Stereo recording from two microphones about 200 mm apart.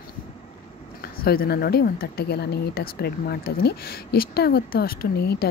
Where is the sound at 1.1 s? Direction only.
50° left (ahead or behind).